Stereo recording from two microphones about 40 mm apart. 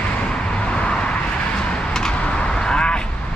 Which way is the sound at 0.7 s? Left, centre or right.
Left.